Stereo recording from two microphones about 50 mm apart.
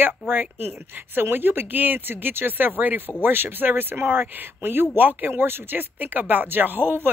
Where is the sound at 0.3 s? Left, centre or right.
Right.